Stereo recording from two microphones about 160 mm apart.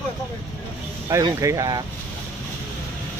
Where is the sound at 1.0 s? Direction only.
20° right (ahead or behind).